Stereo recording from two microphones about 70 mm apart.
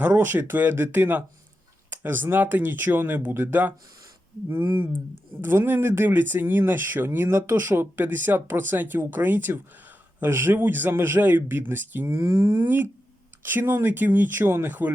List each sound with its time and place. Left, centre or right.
0.0 s a man's voice: right
5.4 s a man's voice: right
12.0 s speech: right
12.6 s a man's voice: right